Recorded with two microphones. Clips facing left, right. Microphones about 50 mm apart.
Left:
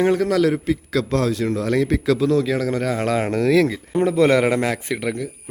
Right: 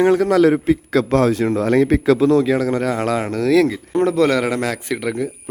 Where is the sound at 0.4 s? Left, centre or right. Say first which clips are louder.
Right 5 dB; right.